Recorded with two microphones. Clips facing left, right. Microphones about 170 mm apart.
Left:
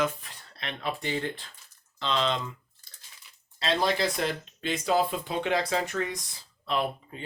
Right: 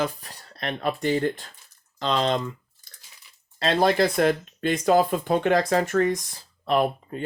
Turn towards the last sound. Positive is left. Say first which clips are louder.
# right 7 dB
turn(degrees=-50)  # may be behind; listen again after turning